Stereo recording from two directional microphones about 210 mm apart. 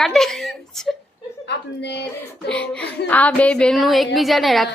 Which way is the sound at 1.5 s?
55° left (ahead or behind).